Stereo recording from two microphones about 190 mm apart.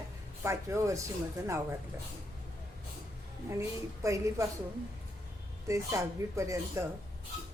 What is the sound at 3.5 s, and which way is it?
Speech, 15° right (ahead or behind).